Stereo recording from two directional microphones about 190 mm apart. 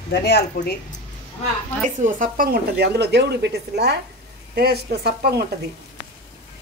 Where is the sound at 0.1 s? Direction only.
60° left (ahead or behind).